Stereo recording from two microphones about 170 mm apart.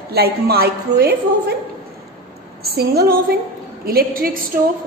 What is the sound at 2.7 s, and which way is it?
A woman's voice, 70° right (ahead or behind).